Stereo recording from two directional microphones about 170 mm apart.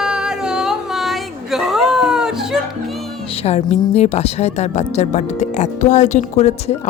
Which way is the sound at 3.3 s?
35° left (ahead or behind).